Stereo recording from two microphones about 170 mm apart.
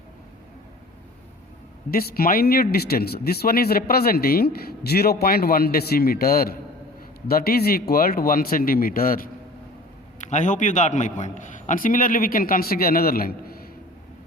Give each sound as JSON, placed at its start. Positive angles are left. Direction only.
{"t": 1.9, "sound": "speech", "side_deg": 60}
{"t": 10.2, "sound": "a man's voice", "side_deg": 45}